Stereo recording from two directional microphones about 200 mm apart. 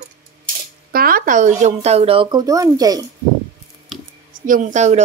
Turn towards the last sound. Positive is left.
turn(degrees=-35)  # may be behind; listen again after turning